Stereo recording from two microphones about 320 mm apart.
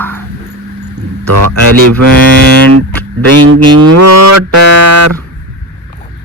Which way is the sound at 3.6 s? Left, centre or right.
Right.